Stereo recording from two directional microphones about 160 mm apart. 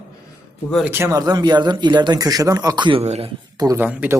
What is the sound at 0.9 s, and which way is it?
Speech, 15° right (ahead or behind).